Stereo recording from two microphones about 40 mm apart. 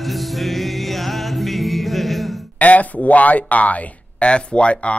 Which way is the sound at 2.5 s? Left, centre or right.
Left.